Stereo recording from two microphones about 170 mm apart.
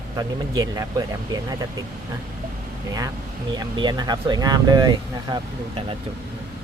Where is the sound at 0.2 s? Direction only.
20° right (ahead or behind).